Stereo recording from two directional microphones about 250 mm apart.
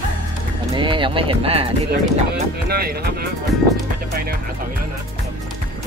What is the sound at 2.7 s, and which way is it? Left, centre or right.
Speech, right.